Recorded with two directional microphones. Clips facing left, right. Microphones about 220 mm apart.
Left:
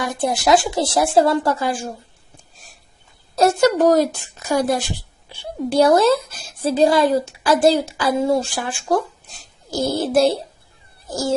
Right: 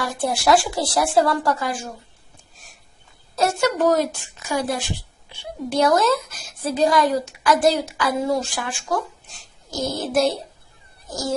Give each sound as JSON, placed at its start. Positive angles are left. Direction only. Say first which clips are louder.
{"t": 0.0, "sound": "a woman's voice", "louder": "left 2 dB", "side_deg": 20}
{"t": 3.3, "sound": "a woman's voice", "louder": "left 5 dB", "side_deg": 40}
{"t": 9.9, "sound": "a woman's voice", "louder": "left 4 dB", "side_deg": 30}